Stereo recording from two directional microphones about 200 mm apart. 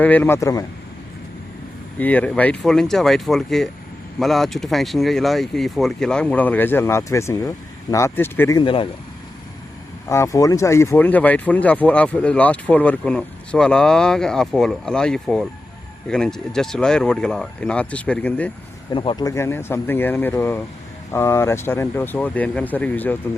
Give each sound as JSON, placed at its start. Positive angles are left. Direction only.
{"t": 0.0, "sound": "speech", "side_deg": 10}
{"t": 2.0, "sound": "speech", "side_deg": 10}
{"t": 10.1, "sound": "speech", "side_deg": 15}
{"t": 18.9, "sound": "speech", "side_deg": 25}